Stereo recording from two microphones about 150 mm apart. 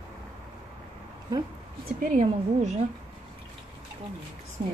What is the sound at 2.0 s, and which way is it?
Speech, 55° right (ahead or behind).